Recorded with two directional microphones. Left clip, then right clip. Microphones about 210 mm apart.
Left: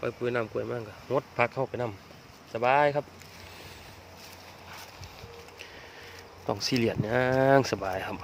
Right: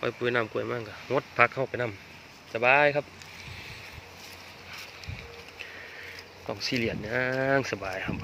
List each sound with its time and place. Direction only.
0.0 s speech: centre (ahead or behind)
6.5 s speech: 40° left (ahead or behind)